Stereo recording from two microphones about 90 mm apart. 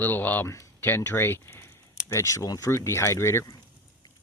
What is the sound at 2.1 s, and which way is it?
Speech, 35° left (ahead or behind).